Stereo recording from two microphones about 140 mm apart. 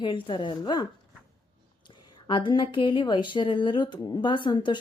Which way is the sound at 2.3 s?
35° left (ahead or behind).